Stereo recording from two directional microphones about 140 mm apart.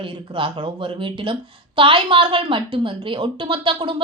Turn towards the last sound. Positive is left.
turn(degrees=-40)  # may be behind; listen again after turning